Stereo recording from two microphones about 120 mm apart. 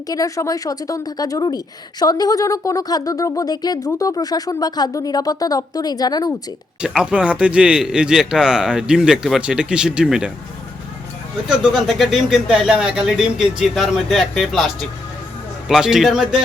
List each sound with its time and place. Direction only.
0.1 s a woman's voice: 30° left (ahead or behind)
6.8 s a man's voice: 5° right (ahead or behind)
11.4 s speech: 5° right (ahead or behind)